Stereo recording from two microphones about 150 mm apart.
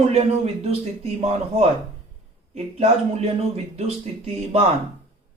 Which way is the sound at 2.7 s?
45° right (ahead or behind).